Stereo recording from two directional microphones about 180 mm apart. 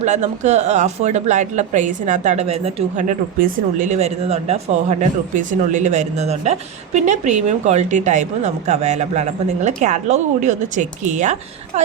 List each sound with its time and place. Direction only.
0.0 s speech: 40° right (ahead or behind)